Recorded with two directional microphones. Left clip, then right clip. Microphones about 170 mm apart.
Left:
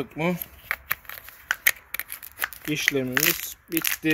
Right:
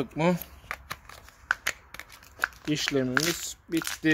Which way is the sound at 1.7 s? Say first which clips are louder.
Left 7 dB; centre (ahead or behind).